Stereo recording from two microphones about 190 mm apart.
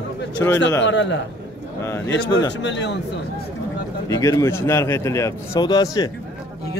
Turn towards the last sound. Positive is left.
turn(degrees=20)  # may be behind; listen again after turning